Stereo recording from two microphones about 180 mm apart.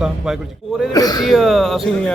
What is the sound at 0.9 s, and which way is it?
Speech, 20° left (ahead or behind).